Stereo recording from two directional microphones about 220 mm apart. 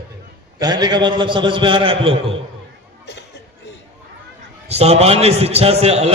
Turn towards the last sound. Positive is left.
turn(degrees=-30)  # may be behind; listen again after turning